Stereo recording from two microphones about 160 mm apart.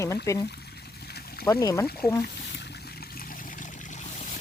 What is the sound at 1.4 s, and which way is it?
Speech, 20° left (ahead or behind).